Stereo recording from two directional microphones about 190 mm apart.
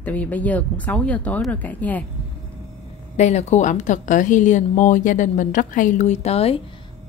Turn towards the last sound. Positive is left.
turn(degrees=35)  # may be behind; listen again after turning